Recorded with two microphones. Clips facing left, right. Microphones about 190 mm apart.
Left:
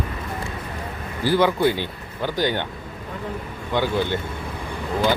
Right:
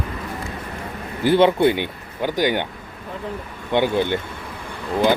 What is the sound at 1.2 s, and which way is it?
Speech, 25° right (ahead or behind).